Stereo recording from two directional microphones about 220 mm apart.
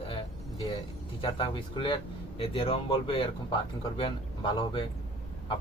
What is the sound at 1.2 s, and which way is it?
A man's voice, 25° left (ahead or behind).